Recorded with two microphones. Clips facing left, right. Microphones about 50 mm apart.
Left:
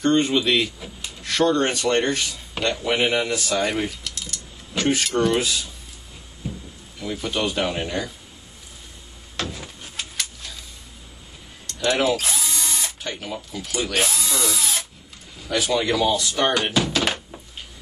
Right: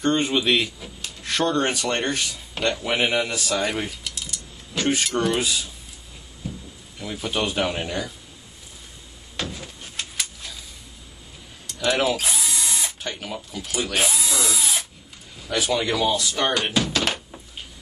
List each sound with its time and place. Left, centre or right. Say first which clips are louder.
0.0 s speech: left 2 dB; centre
2.6 s mechanisms: left 1 dB; centre
6.4 s a sound: left 1 dB; centre
7.0 s speech: left 1 dB; centre
9.4 s a sound: left 1 dB; centre
11.6 s drill: left 1 dB; centre
15.4 s speech: left 1 dB; centre